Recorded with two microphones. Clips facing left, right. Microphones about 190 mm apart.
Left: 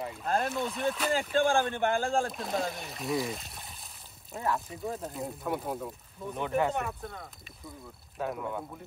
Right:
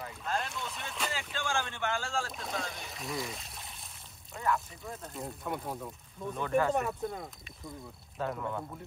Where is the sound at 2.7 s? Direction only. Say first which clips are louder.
Left 6 dB; centre (ahead or behind).